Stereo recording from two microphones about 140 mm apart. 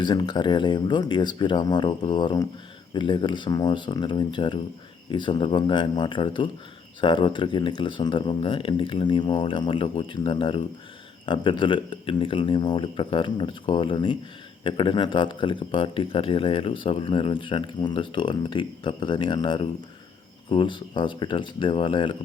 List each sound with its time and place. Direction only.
0.0 s speech: 35° left (ahead or behind)